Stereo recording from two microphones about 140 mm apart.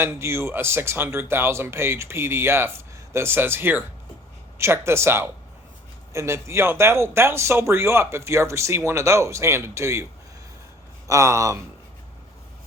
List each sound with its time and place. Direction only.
0.0 s speech: 20° right (ahead or behind)
11.1 s speech: 20° right (ahead or behind)